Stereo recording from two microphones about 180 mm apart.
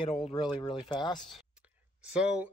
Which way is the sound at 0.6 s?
25° left (ahead or behind).